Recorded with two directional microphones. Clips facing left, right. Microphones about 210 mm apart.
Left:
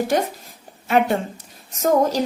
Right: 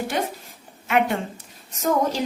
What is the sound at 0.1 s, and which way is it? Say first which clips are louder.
Speech: left 5 dB; 40° left (ahead or behind).